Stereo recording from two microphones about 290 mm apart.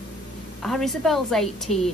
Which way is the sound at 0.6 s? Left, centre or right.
Centre.